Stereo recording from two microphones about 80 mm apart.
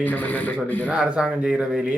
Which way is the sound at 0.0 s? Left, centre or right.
Left.